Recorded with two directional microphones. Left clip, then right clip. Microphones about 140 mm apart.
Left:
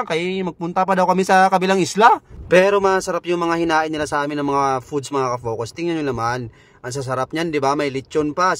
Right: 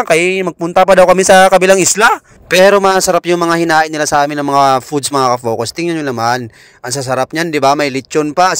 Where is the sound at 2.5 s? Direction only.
40° right (ahead or behind).